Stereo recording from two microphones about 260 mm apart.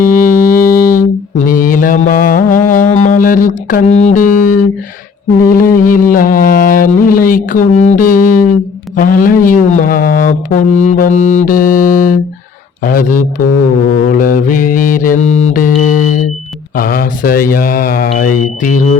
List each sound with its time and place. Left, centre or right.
0.0 s music: left
5.5 s mantra: left